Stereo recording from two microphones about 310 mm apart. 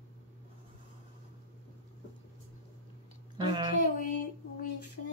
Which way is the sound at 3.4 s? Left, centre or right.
Centre.